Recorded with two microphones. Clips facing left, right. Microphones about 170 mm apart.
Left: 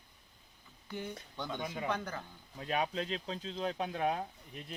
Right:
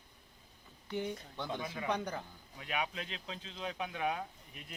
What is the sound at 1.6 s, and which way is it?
Speech, 20° left (ahead or behind).